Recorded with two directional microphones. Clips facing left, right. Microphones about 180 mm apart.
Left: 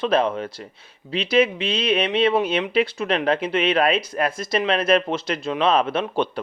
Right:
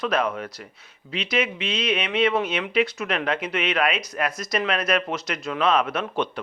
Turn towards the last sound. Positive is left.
turn(degrees=30)  # may be behind; listen again after turning